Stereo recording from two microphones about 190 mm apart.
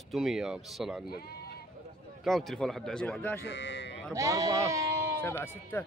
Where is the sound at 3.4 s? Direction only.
70° left (ahead or behind).